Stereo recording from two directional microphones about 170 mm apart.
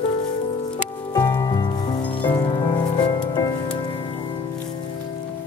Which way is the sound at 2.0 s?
10° left (ahead or behind).